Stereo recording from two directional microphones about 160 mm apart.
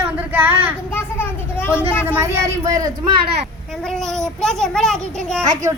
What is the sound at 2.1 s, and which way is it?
Speech, 20° right (ahead or behind).